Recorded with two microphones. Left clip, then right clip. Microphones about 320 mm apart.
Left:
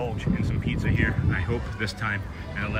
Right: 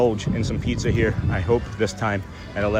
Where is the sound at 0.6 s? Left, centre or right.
Centre.